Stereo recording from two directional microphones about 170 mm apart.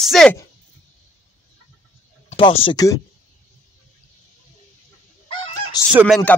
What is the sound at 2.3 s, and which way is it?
Speech, 35° left (ahead or behind).